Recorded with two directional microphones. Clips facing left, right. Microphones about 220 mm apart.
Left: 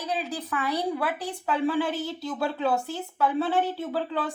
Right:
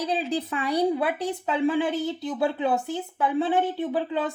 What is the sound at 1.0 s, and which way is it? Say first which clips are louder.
Speech: right 4 dB; 25° right (ahead or behind).